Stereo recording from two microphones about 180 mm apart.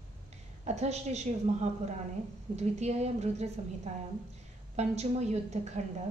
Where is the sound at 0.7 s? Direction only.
40° right (ahead or behind).